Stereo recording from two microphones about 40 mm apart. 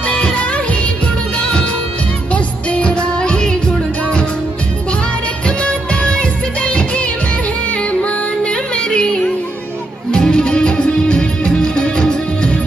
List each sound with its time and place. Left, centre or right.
0.0 s music: left
5.6 s music: left